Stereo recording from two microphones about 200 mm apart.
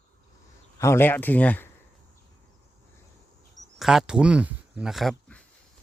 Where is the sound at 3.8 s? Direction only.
Centre (ahead or behind).